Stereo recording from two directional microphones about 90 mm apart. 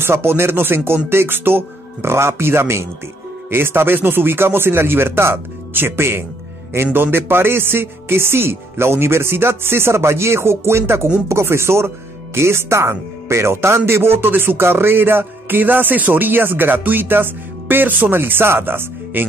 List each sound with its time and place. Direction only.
0.0 s speech: 25° right (ahead or behind)